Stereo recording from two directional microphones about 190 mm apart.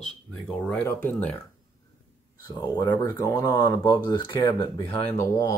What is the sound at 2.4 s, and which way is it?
Speech, 20° left (ahead or behind).